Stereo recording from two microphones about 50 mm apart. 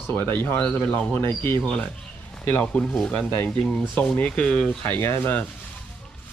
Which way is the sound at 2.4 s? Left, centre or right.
Left.